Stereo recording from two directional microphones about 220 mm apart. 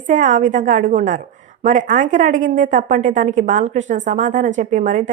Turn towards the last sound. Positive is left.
turn(degrees=-35)  # may be behind; listen again after turning